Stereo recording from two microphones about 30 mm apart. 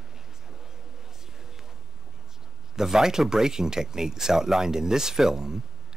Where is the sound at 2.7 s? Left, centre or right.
Centre.